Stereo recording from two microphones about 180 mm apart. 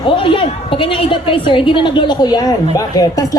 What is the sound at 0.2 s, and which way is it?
A woman's voice, 30° left (ahead or behind).